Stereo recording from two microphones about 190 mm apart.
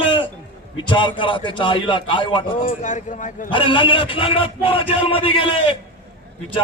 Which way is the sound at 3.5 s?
25° left (ahead or behind).